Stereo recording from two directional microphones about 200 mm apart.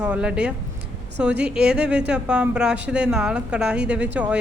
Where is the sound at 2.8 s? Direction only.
55° right (ahead or behind).